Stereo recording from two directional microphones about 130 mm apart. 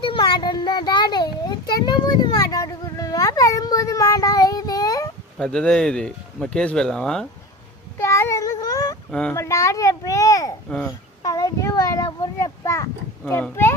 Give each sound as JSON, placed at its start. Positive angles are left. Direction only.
{"t": 0.0, "sound": "child singing", "side_deg": 35}
{"t": 5.4, "sound": "speech", "side_deg": 5}
{"t": 7.9, "sound": "child singing", "side_deg": 20}
{"t": 9.3, "sound": "a child's voice", "side_deg": 20}